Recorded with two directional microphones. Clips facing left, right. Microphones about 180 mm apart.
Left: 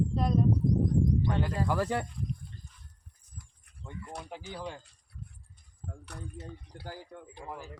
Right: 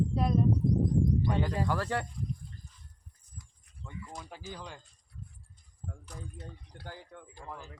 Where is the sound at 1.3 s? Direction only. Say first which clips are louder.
Even; centre (ahead or behind).